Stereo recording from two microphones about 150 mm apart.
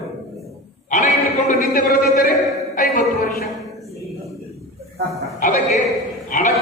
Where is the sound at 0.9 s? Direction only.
55° left (ahead or behind); by 2.0 s 70° left (ahead or behind).